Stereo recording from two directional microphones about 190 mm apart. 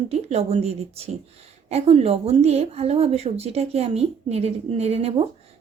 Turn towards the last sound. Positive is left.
turn(degrees=-30)  # may be behind; listen again after turning